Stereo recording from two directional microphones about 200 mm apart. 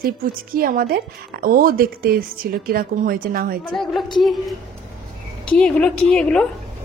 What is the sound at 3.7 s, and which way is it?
A woman's voice, centre (ahead or behind).